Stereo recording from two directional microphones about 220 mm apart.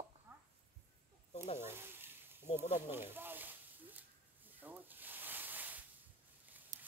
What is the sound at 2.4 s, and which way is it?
Speech, 30° left (ahead or behind).